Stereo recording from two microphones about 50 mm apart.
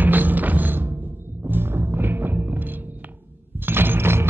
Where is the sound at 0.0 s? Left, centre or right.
Right.